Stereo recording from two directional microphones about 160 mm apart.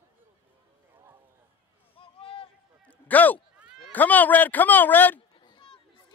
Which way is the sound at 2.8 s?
10° left (ahead or behind).